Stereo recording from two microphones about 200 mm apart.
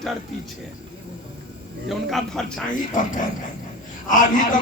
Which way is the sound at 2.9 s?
40° left (ahead or behind).